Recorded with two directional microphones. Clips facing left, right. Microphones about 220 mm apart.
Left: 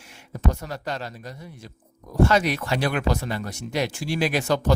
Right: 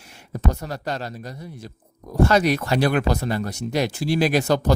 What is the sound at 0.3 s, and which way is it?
Speech, 40° right (ahead or behind).